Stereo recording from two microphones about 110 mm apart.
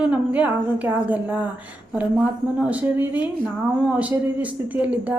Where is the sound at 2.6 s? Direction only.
15° right (ahead or behind).